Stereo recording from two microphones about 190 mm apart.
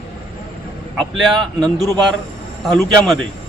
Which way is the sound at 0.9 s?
Centre (ahead or behind).